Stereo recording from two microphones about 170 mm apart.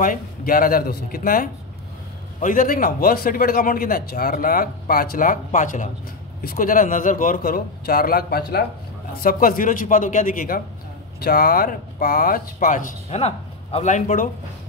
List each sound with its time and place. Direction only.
0.0 s a man's voice: 55° left (ahead or behind)